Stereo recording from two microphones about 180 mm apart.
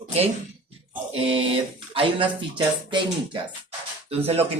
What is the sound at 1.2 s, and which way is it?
Speech, 30° right (ahead or behind).